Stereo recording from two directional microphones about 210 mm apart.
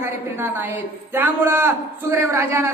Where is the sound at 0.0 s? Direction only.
10° right (ahead or behind).